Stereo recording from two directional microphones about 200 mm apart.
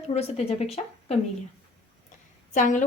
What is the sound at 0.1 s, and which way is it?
A woman's voice, 30° left (ahead or behind).